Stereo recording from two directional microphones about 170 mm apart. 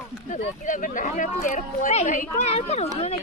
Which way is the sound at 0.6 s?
50° left (ahead or behind).